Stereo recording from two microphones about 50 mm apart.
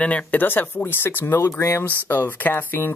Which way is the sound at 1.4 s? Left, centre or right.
Left.